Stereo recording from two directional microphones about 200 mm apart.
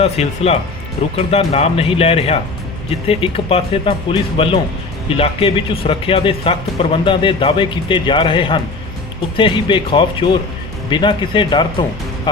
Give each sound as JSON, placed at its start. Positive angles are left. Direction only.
{"t": 0.0, "sound": "speech", "side_deg": 30}